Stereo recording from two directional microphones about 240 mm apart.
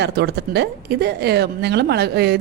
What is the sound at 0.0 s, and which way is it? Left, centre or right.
Speech, right.